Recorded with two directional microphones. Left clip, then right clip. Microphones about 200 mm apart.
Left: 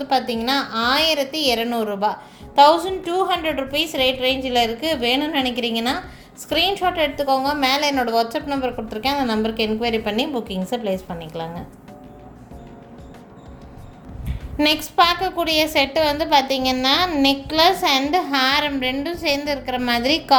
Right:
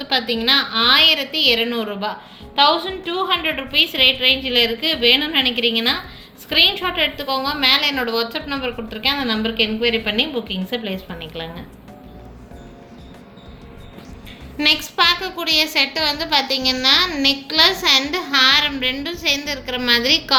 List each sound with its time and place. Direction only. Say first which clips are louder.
0.0 s a woman's voice: right 1 dB; 55° left (ahead or behind)
14.3 s a sound: right 2 dB; 50° left (ahead or behind)
14.9 s a woman's voice: left 1 dB; 50° left (ahead or behind)